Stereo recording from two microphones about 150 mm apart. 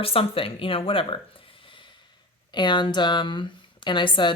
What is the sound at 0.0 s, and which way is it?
Speech, 40° left (ahead or behind).